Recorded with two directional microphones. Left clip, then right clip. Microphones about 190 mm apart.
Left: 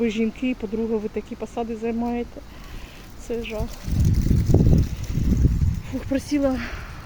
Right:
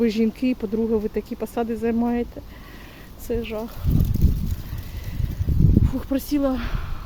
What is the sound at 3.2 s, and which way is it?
Speech, 15° right (ahead or behind).